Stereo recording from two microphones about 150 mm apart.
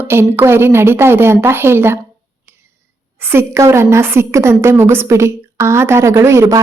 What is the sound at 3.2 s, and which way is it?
A woman's voice, 15° right (ahead or behind).